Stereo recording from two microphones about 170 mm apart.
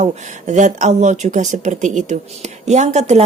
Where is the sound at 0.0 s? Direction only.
45° right (ahead or behind).